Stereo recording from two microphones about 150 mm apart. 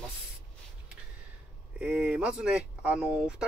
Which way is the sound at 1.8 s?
10° right (ahead or behind).